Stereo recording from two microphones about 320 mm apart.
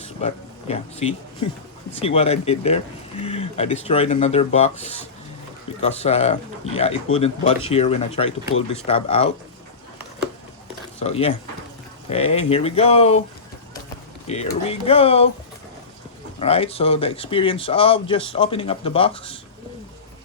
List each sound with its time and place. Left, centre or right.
0.0 s speech: centre
11.0 s speech: centre
14.3 s speech: centre
16.4 s speech: centre